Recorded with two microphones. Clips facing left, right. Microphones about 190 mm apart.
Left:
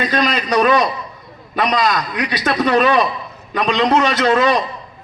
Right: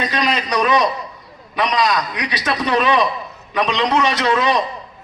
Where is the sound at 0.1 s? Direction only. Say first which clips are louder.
Left 3 dB; 50° left (ahead or behind).